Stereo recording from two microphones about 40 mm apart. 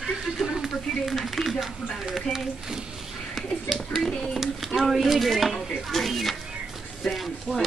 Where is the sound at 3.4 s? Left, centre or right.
Centre.